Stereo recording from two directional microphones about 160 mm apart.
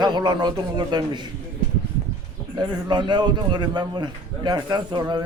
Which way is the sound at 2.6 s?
25° right (ahead or behind).